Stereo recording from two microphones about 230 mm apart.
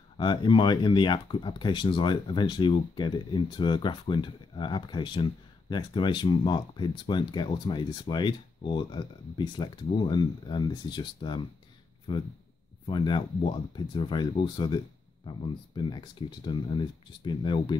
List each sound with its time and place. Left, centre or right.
0.2 s speech: centre